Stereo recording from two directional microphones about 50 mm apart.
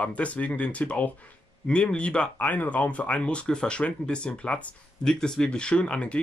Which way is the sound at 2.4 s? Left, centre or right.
Left.